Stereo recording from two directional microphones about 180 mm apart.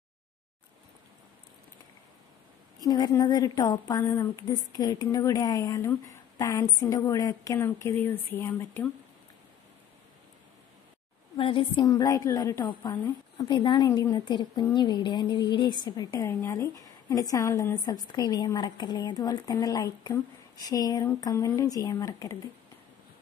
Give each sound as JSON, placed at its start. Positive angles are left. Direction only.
{"t": 2.8, "sound": "a woman's voice", "side_deg": 20}
{"t": 11.3, "sound": "a woman's voice", "side_deg": 30}
{"t": 11.8, "sound": "a woman's voice", "side_deg": 20}